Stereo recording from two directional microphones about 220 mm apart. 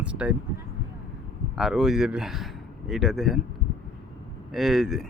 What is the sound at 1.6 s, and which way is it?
A man's voice, centre (ahead or behind).